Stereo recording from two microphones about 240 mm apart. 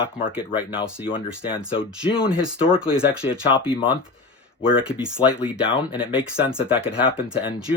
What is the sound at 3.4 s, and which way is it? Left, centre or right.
Speech, left.